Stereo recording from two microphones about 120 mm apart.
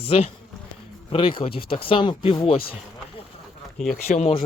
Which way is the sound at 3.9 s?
85° left.